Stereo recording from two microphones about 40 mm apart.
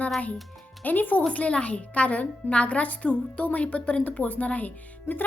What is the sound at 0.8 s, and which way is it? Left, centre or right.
Speech, left.